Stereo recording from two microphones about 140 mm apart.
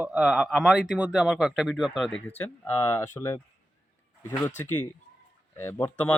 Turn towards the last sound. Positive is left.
turn(degrees=15)  # may be behind; listen again after turning